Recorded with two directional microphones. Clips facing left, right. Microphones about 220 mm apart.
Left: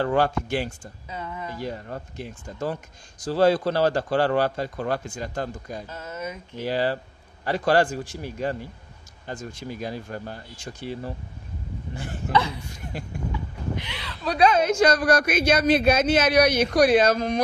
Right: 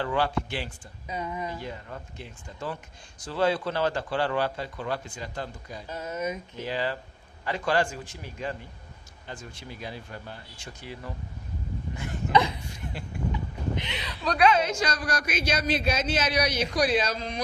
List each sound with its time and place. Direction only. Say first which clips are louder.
0.0 s a man's voice: left 5 dB; 45° left (ahead or behind)
1.0 s speech: right 2 dB; 15° right (ahead or behind)
1.6 s a man's voice: left 6 dB; 40° left (ahead or behind)
5.9 s speech: right 2 dB; 15° right (ahead or behind)
6.6 s a man's voice: left 6 dB; 35° left (ahead or behind)
12.3 s speech: even; 15° right (ahead or behind)
12.9 s a man's voice: left 8 dB; 45° left (ahead or behind)
13.7 s speech: even; 20° right (ahead or behind)
14.4 s a man's voice: left 5 dB; 45° left (ahead or behind)